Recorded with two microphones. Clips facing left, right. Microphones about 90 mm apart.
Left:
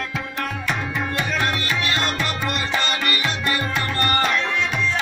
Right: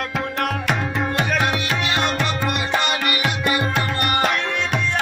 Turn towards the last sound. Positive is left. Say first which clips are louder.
# right 1 dB
turn(degrees=-60)  # may be behind; listen again after turning